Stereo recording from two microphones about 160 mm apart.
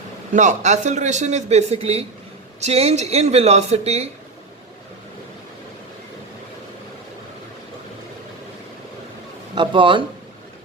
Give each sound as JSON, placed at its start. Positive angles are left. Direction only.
{"t": 0.3, "sound": "a man's voice", "side_deg": -45}
{"t": 9.6, "sound": "speech", "side_deg": -30}